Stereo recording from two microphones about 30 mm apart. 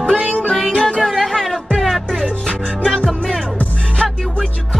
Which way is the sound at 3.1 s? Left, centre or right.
Centre.